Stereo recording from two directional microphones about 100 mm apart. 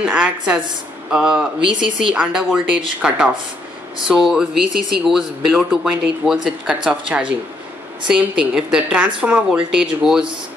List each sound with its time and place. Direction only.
0.0 s a woman's voice: 10° right (ahead or behind)